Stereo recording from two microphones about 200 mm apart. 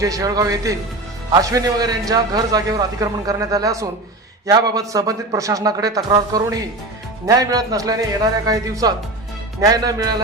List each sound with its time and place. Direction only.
0.0 s a man's voice: 15° right (ahead or behind)